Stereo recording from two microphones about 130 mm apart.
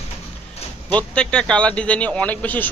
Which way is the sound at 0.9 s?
10° left (ahead or behind).